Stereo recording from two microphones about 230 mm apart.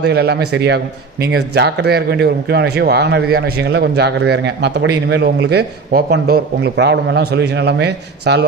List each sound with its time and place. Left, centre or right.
0.0 s a man's voice: right